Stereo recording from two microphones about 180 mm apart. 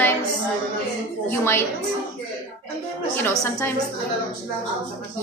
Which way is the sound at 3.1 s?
15° left (ahead or behind).